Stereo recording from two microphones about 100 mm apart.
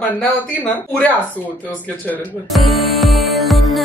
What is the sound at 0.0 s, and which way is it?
Speech, 15° left (ahead or behind).